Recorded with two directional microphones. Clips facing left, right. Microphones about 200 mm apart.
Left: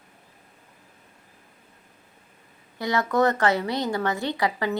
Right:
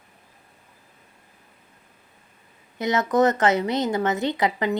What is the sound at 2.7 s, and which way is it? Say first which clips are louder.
A woman's voice: right 2 dB; 20° right (ahead or behind).